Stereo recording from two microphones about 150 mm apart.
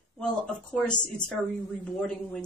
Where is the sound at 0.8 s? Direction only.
5° left (ahead or behind).